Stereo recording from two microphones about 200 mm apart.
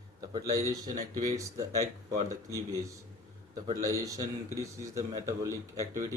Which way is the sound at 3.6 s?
15° right (ahead or behind).